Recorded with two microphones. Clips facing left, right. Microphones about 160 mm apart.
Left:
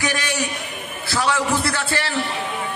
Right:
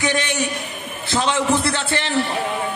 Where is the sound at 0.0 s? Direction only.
25° right (ahead or behind).